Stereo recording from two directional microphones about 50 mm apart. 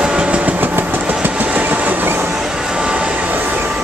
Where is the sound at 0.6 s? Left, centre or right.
Right.